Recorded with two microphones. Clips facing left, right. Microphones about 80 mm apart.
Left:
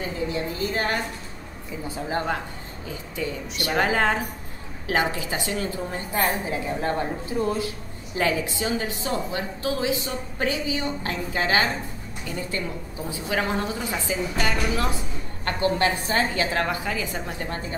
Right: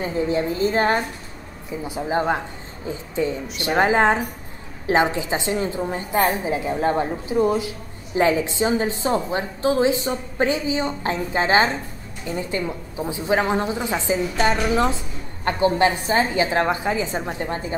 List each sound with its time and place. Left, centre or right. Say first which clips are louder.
0.0 s a woman's voice: right 6 dB; right